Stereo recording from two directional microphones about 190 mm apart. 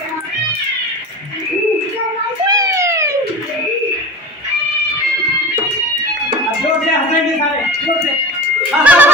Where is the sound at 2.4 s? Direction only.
20° right (ahead or behind).